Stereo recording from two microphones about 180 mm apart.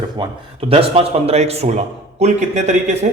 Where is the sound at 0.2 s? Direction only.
25° right (ahead or behind).